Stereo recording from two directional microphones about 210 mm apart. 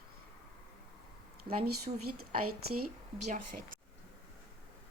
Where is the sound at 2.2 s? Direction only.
90° right.